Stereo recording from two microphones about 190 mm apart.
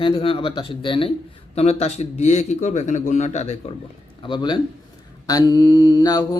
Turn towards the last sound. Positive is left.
turn(degrees=20)  # may be behind; listen again after turning